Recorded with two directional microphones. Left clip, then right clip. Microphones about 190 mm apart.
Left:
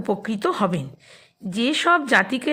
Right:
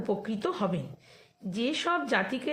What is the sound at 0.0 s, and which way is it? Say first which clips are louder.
A woman's voice: left 7 dB; 35° left (ahead or behind).